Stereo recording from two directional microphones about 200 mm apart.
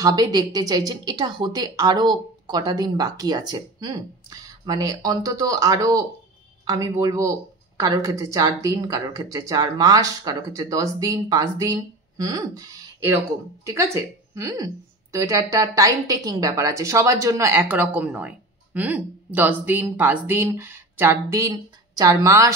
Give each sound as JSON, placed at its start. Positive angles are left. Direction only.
{"t": 0.0, "sound": "a woman's voice", "side_deg": -20}